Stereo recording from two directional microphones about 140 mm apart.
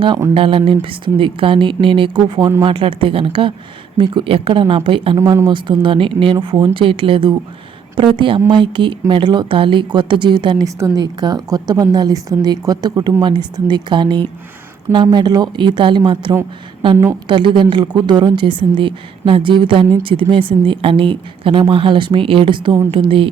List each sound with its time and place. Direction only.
0.3 s a woman's voice: 40° right (ahead or behind)
5.1 s a woman's voice: 20° right (ahead or behind)
5.5 s a woman's voice: 35° right (ahead or behind)